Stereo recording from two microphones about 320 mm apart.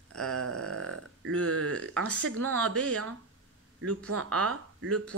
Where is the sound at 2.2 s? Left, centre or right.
Right.